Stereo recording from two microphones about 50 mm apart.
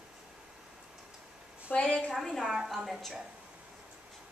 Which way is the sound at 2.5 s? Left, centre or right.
Centre.